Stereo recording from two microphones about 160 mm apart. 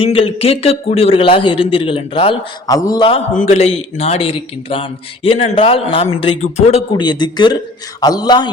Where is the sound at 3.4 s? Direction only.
40° left (ahead or behind).